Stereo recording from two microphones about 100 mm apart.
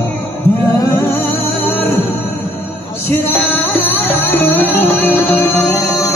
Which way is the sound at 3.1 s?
20° left (ahead or behind).